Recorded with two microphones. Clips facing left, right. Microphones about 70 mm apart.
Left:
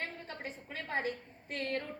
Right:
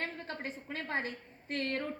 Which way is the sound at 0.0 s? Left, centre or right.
Right.